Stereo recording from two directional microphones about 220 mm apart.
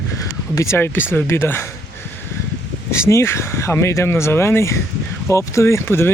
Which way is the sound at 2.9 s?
10° left (ahead or behind).